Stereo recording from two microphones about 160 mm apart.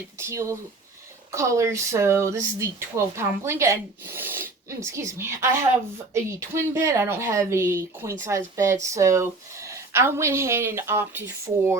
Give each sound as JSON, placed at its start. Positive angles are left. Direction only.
{"t": 0.2, "sound": "speech", "side_deg": -15}